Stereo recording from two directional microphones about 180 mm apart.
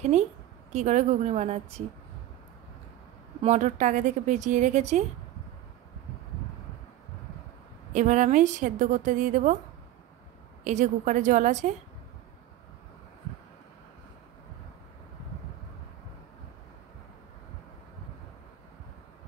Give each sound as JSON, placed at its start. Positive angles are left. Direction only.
{"t": 0.1, "sound": "a woman's voice", "side_deg": -40}
{"t": 3.4, "sound": "a woman's voice", "side_deg": -40}
{"t": 7.9, "sound": "a woman's voice", "side_deg": -45}
{"t": 10.6, "sound": "a woman's voice", "side_deg": -40}